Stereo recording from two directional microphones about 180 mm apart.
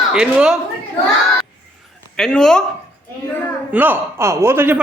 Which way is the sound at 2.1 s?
5° left (ahead or behind).